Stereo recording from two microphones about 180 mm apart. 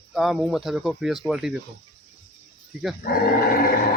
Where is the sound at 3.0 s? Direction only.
50° left (ahead or behind).